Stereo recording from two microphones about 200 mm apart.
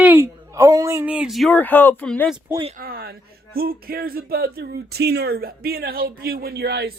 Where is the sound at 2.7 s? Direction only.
45° right (ahead or behind).